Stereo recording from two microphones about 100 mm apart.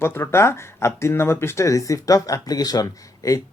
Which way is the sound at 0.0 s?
25° left (ahead or behind).